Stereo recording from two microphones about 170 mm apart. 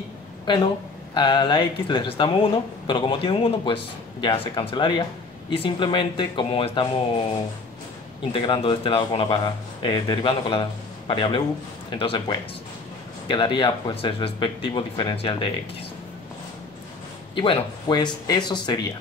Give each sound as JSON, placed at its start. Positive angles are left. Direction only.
{"t": 0.5, "sound": "speech", "side_deg": 30}
{"t": 8.3, "sound": "speech", "side_deg": 30}
{"t": 17.4, "sound": "speech", "side_deg": 30}